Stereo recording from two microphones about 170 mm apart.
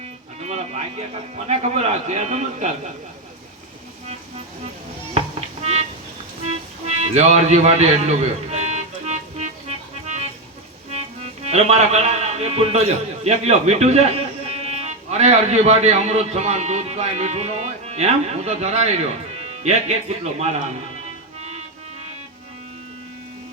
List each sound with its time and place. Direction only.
0.3 s music: 40° right (ahead or behind)
1.5 s a man's voice: 40° right (ahead or behind)
6.4 s music: 40° right (ahead or behind)
11.2 s a man's voice: 40° right (ahead or behind)